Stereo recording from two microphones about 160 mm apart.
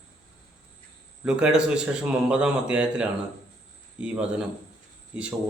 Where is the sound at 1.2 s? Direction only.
5° right (ahead or behind).